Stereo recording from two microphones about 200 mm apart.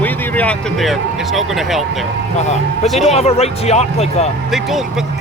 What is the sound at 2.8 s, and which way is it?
Speech, centre (ahead or behind).